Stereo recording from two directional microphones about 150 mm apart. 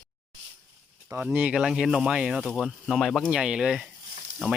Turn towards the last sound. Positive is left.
turn(degrees=-5)  # may be behind; listen again after turning